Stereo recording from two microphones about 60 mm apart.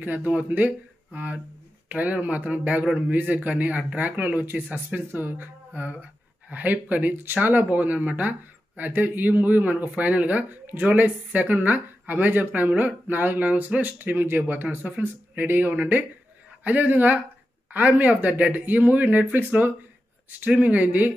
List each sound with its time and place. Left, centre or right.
0.0 s speech: right